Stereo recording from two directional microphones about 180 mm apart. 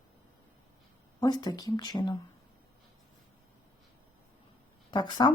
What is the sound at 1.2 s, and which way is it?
Speech, 25° left (ahead or behind).